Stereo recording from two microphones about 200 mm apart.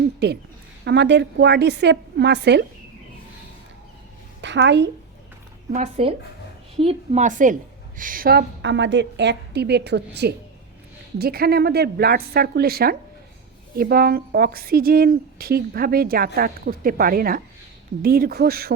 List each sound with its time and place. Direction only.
0.2 s a woman's voice: 55° right (ahead or behind)
4.4 s a woman's voice: 60° right (ahead or behind)
5.7 s a woman's voice: 30° right (ahead or behind); by 18.7 s 50° right (ahead or behind)